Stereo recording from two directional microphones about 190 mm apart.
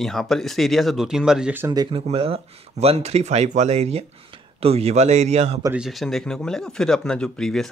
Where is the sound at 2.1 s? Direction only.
30° right (ahead or behind).